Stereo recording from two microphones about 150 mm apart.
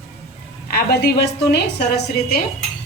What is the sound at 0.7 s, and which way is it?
A woman's voice, 90° left.